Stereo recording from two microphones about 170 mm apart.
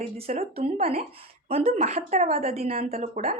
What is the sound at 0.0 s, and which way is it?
Speech, 40° right (ahead or behind).